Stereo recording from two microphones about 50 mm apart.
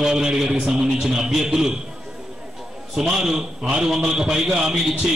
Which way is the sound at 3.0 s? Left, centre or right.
Centre.